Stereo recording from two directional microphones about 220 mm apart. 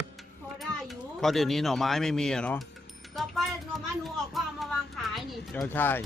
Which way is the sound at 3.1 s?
Centre (ahead or behind).